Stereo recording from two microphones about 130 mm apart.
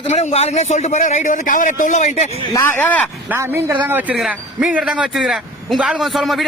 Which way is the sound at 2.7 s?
15° left (ahead or behind).